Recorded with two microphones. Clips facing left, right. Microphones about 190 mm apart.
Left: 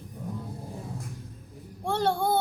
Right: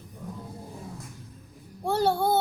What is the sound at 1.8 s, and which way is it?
Child singing, 5° right (ahead or behind).